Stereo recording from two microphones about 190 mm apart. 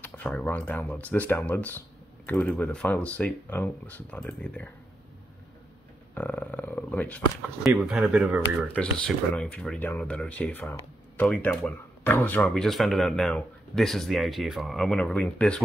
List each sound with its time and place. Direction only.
0.0 s speech: 5° left (ahead or behind)
6.1 s speech: 5° left (ahead or behind)
7.6 s speech: 5° right (ahead or behind)
8.7 s speech: 5° left (ahead or behind)